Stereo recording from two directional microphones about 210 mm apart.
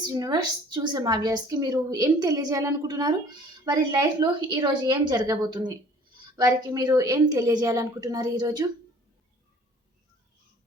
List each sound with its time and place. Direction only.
0.0 s a woman's voice: 20° right (ahead or behind)